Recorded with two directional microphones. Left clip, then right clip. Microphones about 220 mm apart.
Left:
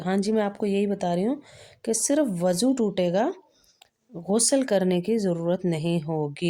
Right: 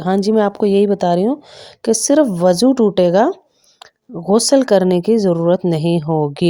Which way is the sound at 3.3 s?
20° right (ahead or behind).